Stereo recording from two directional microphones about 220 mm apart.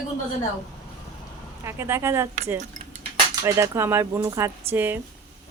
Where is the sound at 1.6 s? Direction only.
10° right (ahead or behind).